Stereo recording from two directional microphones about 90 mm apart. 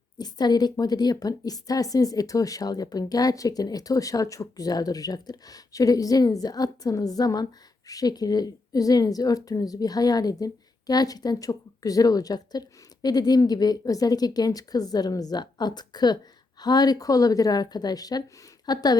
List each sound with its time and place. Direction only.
0.2 s a woman's voice: 50° left (ahead or behind)